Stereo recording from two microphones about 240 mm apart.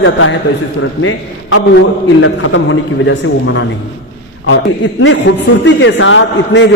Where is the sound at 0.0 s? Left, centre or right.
Left.